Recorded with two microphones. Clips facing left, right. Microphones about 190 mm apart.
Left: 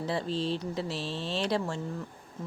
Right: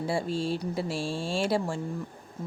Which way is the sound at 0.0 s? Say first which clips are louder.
Right 2 dB; 10° right (ahead or behind).